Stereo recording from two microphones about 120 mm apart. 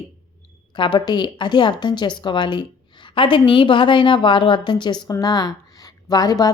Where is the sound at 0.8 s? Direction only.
40° left (ahead or behind).